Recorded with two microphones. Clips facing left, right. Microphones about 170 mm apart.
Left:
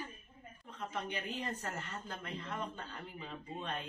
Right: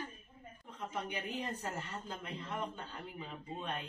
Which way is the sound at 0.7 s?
15° right (ahead or behind).